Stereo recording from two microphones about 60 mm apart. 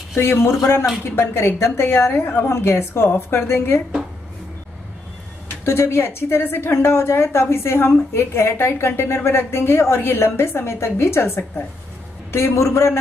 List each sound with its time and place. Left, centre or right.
0.1 s a woman's voice: left
5.7 s a woman's voice: left